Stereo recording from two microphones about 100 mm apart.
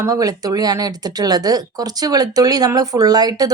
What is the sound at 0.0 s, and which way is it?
Speech, 35° right (ahead or behind).